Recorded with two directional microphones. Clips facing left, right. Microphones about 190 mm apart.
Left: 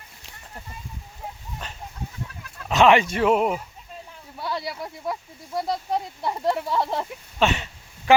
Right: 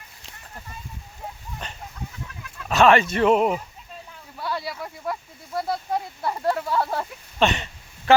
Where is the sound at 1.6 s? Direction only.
Centre (ahead or behind).